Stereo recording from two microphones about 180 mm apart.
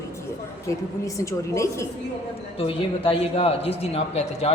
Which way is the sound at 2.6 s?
30° left (ahead or behind).